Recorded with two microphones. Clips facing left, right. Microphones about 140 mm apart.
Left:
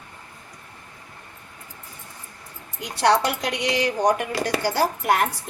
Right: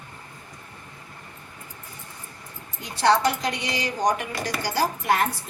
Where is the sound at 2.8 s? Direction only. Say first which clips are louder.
Left 1 dB; 75° left (ahead or behind).